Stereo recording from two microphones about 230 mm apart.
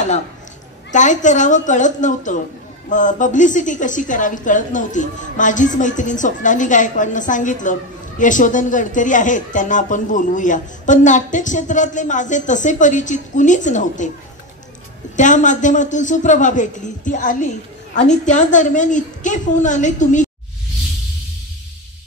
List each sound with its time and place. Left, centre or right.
0.9 s a woman's voice: left
15.1 s a woman's voice: left